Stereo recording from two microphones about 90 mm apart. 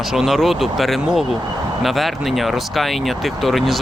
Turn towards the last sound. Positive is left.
turn(degrees=0)  # may be behind; listen again after turning